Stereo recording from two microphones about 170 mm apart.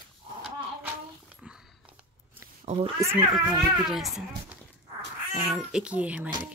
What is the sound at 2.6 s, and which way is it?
Cat, 40° right (ahead or behind).